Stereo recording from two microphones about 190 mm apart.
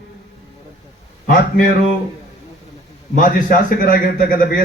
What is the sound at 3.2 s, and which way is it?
Speech, 45° left (ahead or behind).